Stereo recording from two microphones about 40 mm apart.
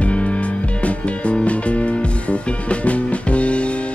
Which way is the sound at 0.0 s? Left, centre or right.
Left.